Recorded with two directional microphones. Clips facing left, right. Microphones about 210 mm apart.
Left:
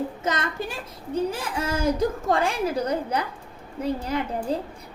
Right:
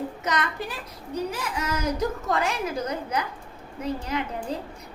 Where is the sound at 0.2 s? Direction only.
25° left (ahead or behind).